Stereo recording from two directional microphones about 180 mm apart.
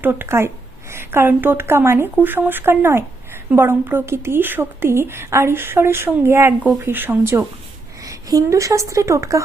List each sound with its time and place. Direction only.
0.0 s a woman's voice: 10° right (ahead or behind)